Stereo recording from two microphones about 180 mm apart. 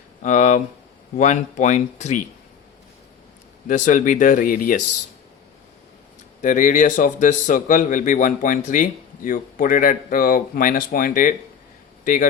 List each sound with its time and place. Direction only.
0.2 s a man's voice: 45° left (ahead or behind)
3.7 s a man's voice: 45° left (ahead or behind)
6.4 s a man's voice: 45° left (ahead or behind)